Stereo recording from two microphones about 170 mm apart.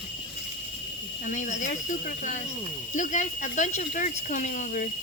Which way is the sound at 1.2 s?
45° left (ahead or behind).